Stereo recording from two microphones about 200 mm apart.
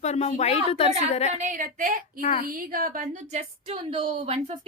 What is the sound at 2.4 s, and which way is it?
A woman's voice, 45° right (ahead or behind).